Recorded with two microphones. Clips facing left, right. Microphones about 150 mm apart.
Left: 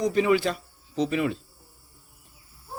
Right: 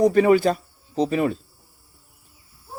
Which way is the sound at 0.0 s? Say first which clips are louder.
Right 6 dB; 50° right (ahead or behind).